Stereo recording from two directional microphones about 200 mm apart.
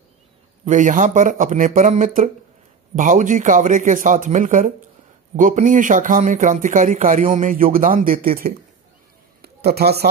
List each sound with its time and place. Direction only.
0.7 s speech: 40° right (ahead or behind)